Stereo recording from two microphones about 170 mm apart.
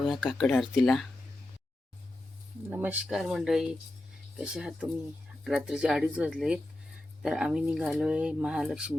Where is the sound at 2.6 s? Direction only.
10° right (ahead or behind).